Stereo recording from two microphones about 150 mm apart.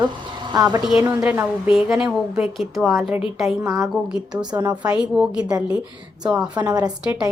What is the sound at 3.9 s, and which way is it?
Speech, 5° right (ahead or behind).